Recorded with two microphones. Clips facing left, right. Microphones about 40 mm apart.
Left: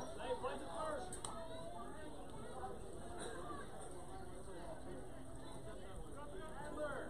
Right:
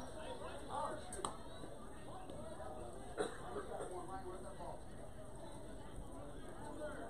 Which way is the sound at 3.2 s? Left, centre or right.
Right.